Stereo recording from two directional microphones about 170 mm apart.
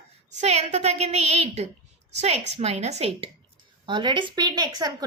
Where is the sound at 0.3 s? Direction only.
40° right (ahead or behind).